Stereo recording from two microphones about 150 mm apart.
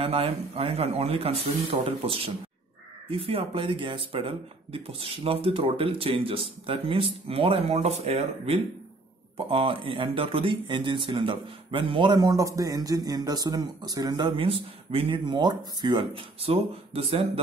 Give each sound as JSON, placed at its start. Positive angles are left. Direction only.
{"t": 0.0, "sound": "speech", "side_deg": -40}